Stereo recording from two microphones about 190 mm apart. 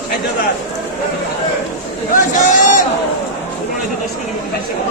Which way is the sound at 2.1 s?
45° left (ahead or behind).